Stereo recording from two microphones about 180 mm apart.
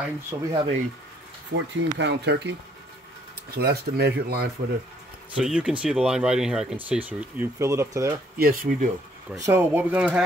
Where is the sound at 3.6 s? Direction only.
65° right (ahead or behind).